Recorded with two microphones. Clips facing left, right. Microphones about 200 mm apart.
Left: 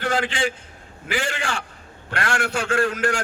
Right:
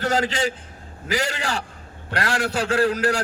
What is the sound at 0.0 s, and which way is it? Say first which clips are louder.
A man's voice: right 1 dB; 40° right (ahead or behind).